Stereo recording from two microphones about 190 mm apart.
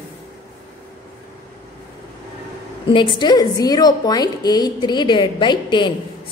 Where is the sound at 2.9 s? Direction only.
25° left (ahead or behind).